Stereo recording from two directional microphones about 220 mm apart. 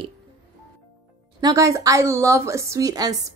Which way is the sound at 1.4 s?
15° right (ahead or behind).